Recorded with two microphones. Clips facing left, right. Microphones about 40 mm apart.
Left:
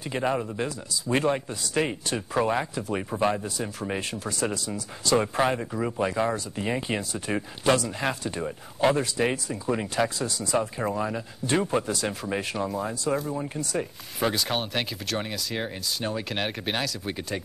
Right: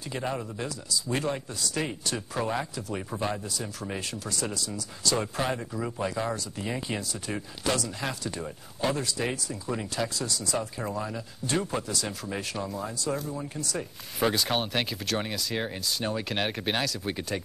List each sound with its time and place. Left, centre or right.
0.1 s speech: left
12.7 s speech: left
14.2 s speech: centre